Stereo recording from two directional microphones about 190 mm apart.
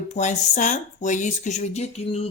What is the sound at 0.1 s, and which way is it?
Speech, 40° left (ahead or behind).